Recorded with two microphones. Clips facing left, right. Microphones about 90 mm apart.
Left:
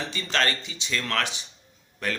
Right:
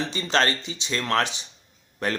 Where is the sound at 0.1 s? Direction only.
25° right (ahead or behind).